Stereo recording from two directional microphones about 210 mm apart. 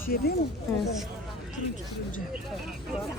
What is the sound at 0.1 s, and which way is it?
Speech, 45° left (ahead or behind).